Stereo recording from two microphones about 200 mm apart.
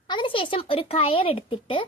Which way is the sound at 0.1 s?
25° left (ahead or behind).